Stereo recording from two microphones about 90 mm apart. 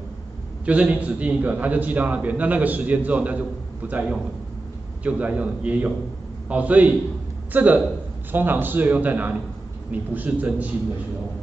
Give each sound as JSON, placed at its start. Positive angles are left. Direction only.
{"t": 0.7, "sound": "a man's voice", "side_deg": -15}